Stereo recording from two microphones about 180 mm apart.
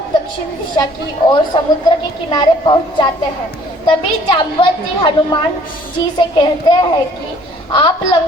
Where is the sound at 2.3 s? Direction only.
25° left (ahead or behind).